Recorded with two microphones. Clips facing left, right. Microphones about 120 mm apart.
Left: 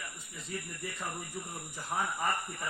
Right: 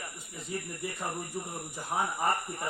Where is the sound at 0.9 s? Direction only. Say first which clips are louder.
Right 3 dB; 30° right (ahead or behind).